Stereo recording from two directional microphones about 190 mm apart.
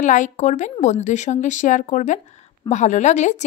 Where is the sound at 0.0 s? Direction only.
40° left (ahead or behind).